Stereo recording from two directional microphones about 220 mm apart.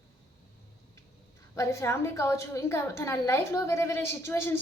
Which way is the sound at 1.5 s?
15° left (ahead or behind).